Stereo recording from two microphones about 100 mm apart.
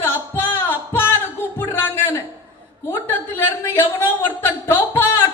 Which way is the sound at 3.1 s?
20° left (ahead or behind).